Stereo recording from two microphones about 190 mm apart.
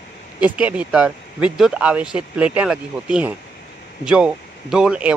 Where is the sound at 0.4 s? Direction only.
5° right (ahead or behind).